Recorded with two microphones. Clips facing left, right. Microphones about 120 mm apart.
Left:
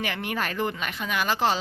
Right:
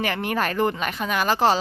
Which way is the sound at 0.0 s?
45° right (ahead or behind).